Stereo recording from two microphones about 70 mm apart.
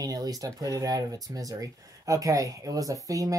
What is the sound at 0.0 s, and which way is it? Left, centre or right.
Speech, right.